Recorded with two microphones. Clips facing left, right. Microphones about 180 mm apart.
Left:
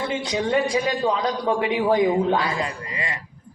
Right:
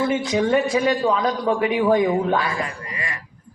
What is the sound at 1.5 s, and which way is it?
A woman's voice, 25° left (ahead or behind).